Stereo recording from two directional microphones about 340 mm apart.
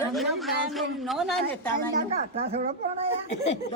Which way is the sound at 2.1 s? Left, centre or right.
Centre.